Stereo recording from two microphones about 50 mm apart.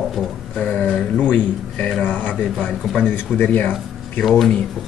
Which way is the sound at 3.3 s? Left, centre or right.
Left.